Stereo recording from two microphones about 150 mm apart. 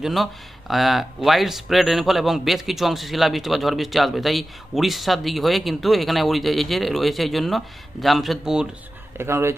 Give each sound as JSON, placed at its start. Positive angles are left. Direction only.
{"t": 0.0, "sound": "speech", "side_deg": 0}
{"t": 9.1, "sound": "speech", "side_deg": -15}